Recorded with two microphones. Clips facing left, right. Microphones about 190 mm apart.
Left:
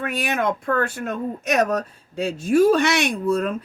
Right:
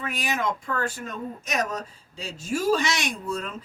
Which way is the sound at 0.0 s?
60° left (ahead or behind).